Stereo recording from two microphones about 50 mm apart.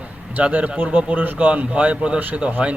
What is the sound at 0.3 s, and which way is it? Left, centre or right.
A man's voice, right.